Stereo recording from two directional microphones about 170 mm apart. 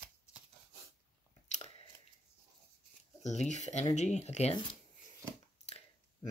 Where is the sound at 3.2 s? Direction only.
45° left (ahead or behind).